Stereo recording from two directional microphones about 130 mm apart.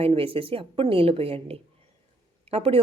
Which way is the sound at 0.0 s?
45° right (ahead or behind).